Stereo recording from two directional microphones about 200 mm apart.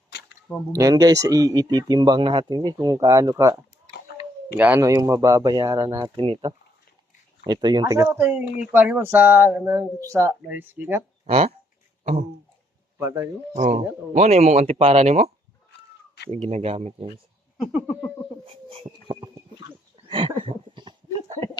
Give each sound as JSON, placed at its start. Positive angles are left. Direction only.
{"t": 0.8, "sound": "speech", "side_deg": -20}
{"t": 11.3, "sound": "speech", "side_deg": -30}
{"t": 13.0, "sound": "speech", "side_deg": -15}
{"t": 13.6, "sound": "speech", "side_deg": -35}
{"t": 16.3, "sound": "speech", "side_deg": -30}
{"t": 17.6, "sound": "a sound", "side_deg": -5}
{"t": 18.4, "sound": "a sound", "side_deg": -30}